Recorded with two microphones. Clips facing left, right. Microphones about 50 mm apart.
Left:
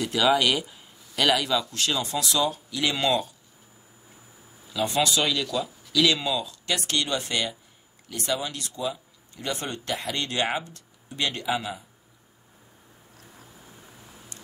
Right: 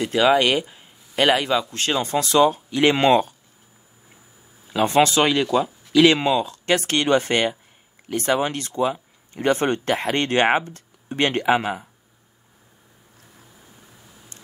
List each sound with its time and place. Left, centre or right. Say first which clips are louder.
0.0 s speech: right 5 dB; right
4.6 s speech: right 7 dB; right